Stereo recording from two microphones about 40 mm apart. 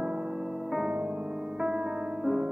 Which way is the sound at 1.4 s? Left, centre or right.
Centre.